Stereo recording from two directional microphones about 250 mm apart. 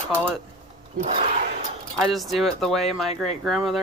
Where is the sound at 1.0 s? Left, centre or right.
Right.